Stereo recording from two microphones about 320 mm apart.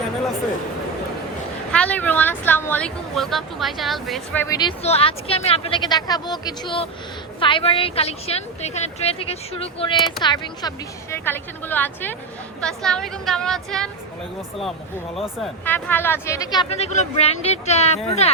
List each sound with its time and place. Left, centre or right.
1.7 s a woman's voice: centre
15.1 s speech: centre